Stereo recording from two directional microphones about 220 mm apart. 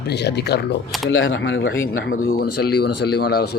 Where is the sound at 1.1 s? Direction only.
60° left (ahead or behind).